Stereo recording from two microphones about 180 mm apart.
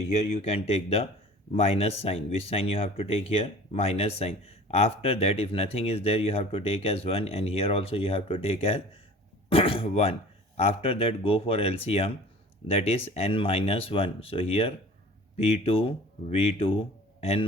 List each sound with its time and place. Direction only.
0.4 s speech: 35° left (ahead or behind)